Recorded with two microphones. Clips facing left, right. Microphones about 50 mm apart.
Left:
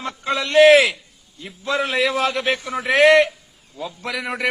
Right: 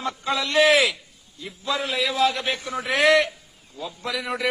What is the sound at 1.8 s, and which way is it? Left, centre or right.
A man's voice, left.